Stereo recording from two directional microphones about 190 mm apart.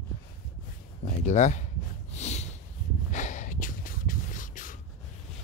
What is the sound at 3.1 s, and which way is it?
Snort, 40° left (ahead or behind).